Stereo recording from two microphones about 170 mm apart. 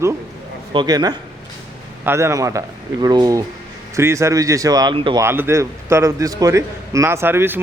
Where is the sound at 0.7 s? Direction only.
25° right (ahead or behind).